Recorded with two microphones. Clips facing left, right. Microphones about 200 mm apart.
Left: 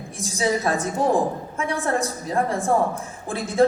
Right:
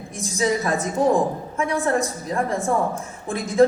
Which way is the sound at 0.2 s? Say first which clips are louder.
Right 1 dB; 35° left (ahead or behind).